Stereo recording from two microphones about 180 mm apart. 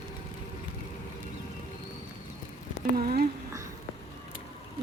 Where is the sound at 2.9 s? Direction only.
55° right (ahead or behind).